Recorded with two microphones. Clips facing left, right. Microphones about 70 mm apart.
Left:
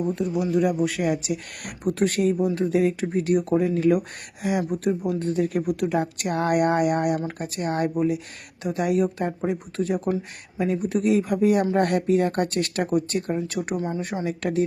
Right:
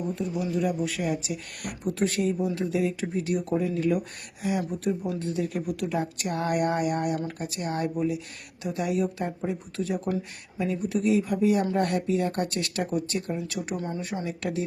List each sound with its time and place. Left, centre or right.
0.2 s speech: left
5.0 s speech: left
5.5 s speech: left
7.3 s speech: left
13.7 s speech: centre